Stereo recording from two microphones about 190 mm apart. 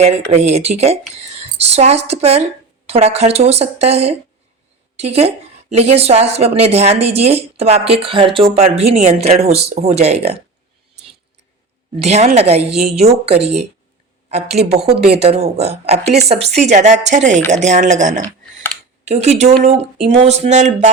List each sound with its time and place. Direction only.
0.0 s a woman's voice: 35° right (ahead or behind)
11.9 s a woman's voice: 35° right (ahead or behind)
13.3 s speech: 60° right (ahead or behind)
14.3 s a woman's voice: 35° right (ahead or behind)